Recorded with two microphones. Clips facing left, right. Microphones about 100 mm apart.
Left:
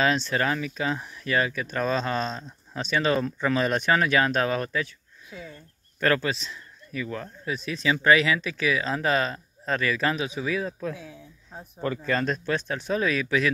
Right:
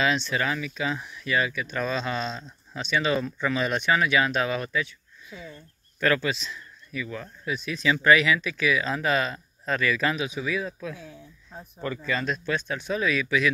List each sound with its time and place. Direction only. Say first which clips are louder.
0.0 s speech: left 1 dB; 40° left (ahead or behind)
5.9 s speech: even; 35° left (ahead or behind)
10.9 s a sound: left 3 dB; 10° left (ahead or behind)
11.8 s speech: left 3 dB; 50° left (ahead or behind)